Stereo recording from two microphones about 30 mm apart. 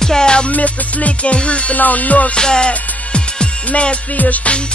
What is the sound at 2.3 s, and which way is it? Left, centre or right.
Music, left.